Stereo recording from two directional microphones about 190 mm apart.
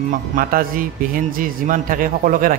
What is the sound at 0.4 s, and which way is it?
A man's voice, 50° right (ahead or behind).